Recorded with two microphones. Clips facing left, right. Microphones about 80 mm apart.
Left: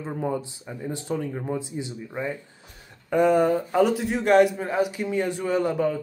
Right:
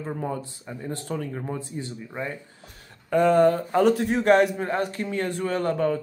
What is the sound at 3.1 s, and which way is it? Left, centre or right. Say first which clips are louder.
Speech: right 1 dB; centre.